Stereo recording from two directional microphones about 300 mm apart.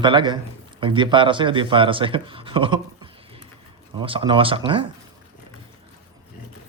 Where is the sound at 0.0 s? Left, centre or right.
Centre.